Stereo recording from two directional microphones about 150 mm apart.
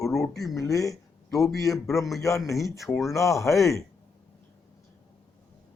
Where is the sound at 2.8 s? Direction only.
Centre (ahead or behind).